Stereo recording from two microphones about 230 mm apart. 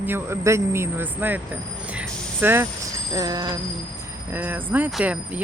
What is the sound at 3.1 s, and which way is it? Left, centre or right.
Speech, centre.